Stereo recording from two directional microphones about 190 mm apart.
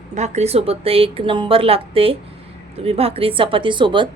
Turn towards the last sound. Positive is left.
turn(degrees=-25)  # may be behind; listen again after turning